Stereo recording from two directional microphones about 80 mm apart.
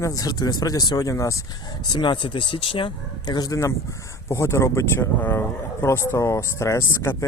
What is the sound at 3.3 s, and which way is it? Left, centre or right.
Speech, left.